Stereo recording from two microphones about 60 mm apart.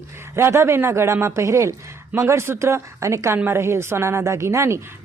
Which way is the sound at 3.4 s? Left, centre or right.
Right.